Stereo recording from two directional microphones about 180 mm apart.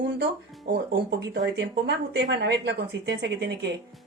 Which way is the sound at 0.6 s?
65° right (ahead or behind).